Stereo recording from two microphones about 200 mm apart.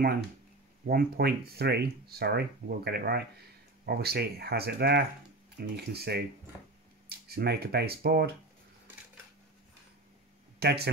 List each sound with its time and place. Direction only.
0.8 s speech: 50° right (ahead or behind)
10.6 s speech: 55° right (ahead or behind)